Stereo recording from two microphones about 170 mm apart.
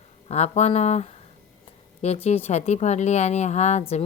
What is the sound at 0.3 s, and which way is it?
A woman's voice, 40° left (ahead or behind).